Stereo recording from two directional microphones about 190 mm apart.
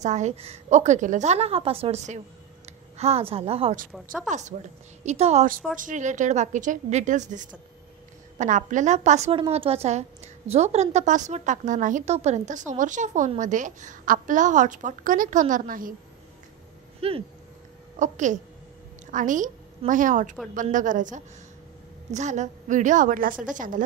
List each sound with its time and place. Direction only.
0.0 s a woman's voice: 40° right (ahead or behind)
17.0 s a woman's voice: 30° right (ahead or behind)